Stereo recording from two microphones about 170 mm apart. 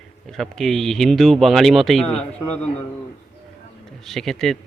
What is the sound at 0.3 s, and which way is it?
Speech, centre (ahead or behind).